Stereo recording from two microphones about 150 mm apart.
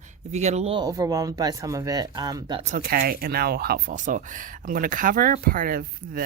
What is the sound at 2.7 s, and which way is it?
Speech, 85° right.